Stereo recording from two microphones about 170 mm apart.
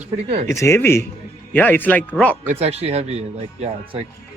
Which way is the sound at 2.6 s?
35° right (ahead or behind).